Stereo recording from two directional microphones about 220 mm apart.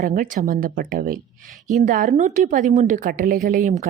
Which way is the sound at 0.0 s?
40° right (ahead or behind).